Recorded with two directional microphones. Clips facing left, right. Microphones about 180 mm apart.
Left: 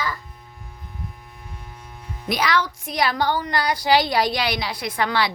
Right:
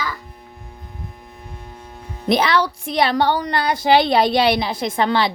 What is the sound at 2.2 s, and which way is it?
A woman's voice, 25° right (ahead or behind).